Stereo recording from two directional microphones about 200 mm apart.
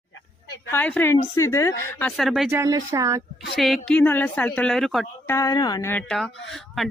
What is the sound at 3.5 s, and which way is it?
Speech, centre (ahead or behind).